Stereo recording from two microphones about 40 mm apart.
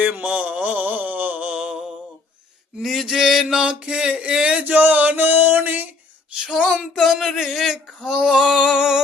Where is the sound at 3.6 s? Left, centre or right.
Right.